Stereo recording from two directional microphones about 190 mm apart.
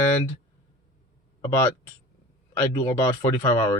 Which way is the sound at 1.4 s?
15° left (ahead or behind).